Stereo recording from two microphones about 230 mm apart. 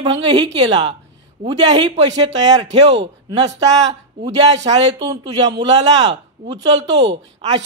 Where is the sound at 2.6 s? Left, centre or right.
Right.